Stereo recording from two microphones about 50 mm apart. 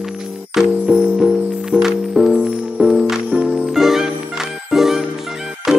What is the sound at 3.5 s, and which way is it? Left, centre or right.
Music, centre.